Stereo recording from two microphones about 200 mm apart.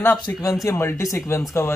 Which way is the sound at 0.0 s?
15° left (ahead or behind).